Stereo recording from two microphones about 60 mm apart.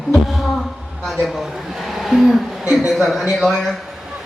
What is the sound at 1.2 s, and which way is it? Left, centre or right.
A man's voice, centre.